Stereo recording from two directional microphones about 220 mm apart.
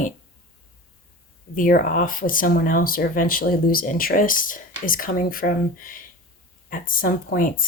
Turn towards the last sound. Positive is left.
turn(degrees=40)  # may be behind; listen again after turning